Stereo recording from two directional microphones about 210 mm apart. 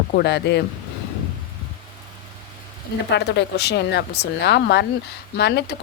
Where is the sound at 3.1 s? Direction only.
55° left (ahead or behind).